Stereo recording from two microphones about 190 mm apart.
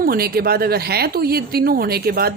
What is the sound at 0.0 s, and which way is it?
Speech, 50° right (ahead or behind).